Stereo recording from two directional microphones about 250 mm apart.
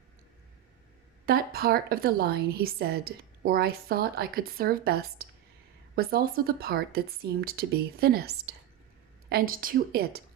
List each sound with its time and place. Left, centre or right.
1.2 s a woman's voice: right